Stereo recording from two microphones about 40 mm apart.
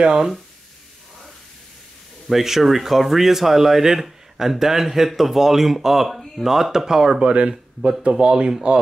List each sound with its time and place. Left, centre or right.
0.0 s speech: centre
2.2 s speech: centre; by 8.5 s right